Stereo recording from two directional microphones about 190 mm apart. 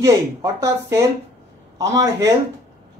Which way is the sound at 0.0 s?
15° right (ahead or behind).